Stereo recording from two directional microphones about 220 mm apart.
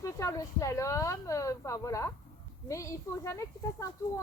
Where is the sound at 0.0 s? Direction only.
15° left (ahead or behind).